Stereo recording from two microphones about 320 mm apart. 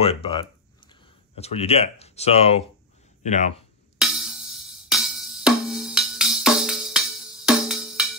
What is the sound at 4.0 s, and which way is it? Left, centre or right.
Music, centre.